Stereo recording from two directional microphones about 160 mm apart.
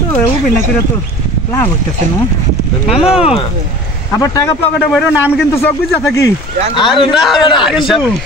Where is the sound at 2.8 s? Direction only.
35° left (ahead or behind).